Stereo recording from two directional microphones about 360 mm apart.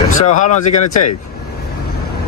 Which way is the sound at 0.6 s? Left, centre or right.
Left.